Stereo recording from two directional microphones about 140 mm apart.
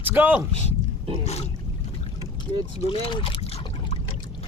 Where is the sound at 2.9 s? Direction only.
35° left (ahead or behind).